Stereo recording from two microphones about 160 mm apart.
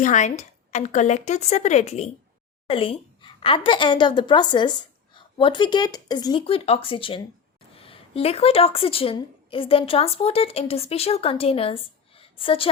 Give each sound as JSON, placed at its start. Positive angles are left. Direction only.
{"t": 0.0, "sound": "a woman's voice", "side_deg": 50}
{"t": 6.4, "sound": "a woman's voice", "side_deg": 35}